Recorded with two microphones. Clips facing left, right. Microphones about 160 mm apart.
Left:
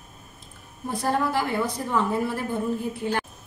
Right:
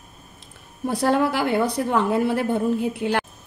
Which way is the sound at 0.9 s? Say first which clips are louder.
Right 4 dB; 75° right (ahead or behind).